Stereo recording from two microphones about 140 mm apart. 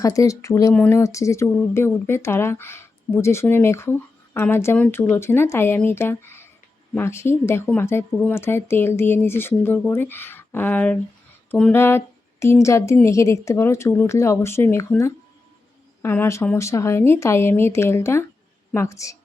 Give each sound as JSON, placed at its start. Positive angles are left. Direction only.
{"t": 0.0, "sound": "a woman's voice", "side_deg": 25}
{"t": 11.7, "sound": "a sound", "side_deg": 15}
{"t": 12.6, "sound": "a woman's voice", "side_deg": 20}